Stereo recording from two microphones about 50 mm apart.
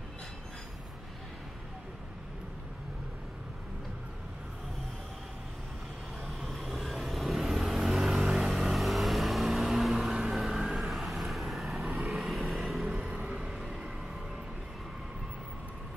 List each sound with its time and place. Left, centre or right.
6.4 s vehicle: centre
12.8 s vehicle: centre
13.6 s vehicle: centre